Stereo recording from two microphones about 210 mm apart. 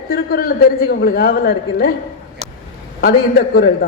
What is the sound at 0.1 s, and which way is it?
A woman's voice, 45° left (ahead or behind).